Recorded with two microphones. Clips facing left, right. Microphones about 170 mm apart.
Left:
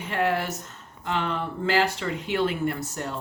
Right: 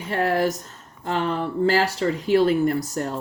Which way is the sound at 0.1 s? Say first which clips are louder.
Right 4 dB; 40° right (ahead or behind).